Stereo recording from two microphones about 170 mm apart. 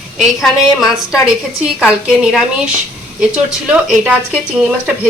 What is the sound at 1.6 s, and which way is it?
Speech, 5° right (ahead or behind).